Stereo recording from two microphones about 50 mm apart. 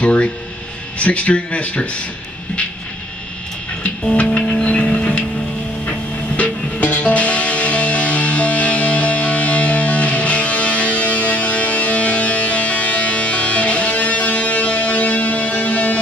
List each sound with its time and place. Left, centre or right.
0.0 s music: left
0.9 s speech: left
3.8 s music: left
4.6 s a sound: left
5.9 s music: left